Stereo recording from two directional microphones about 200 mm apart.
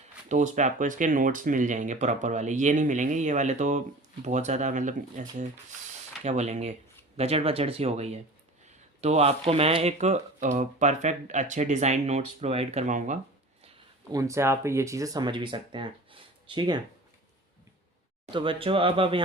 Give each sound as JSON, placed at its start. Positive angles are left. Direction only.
{"t": 0.3, "sound": "speech", "side_deg": -40}
{"t": 14.1, "sound": "speech", "side_deg": -15}
{"t": 18.3, "sound": "speech", "side_deg": -25}